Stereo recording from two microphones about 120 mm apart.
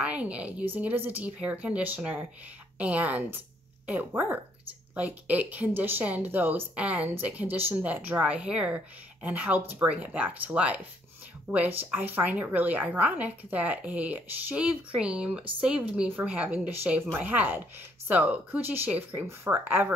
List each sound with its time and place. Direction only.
0.0 s speech: 10° right (ahead or behind)